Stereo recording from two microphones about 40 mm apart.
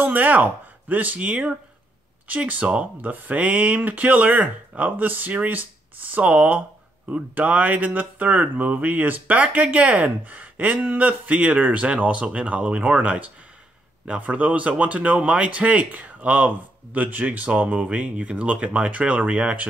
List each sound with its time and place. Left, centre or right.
0.0 s speech: right
6.1 s speech: right
17.5 s speech: right